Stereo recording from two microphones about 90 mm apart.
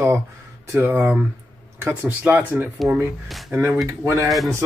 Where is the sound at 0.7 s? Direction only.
25° right (ahead or behind).